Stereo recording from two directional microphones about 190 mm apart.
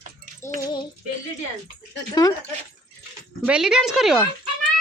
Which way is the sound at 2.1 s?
20° left (ahead or behind).